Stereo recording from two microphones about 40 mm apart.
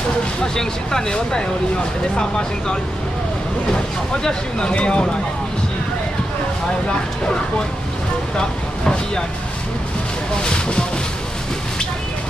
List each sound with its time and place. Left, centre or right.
0.6 s speech: centre
4.2 s speech: left
8.4 s speech: left
10.4 s speech: left